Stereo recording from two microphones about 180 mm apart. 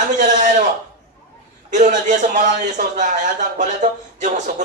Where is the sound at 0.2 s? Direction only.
45° right (ahead or behind).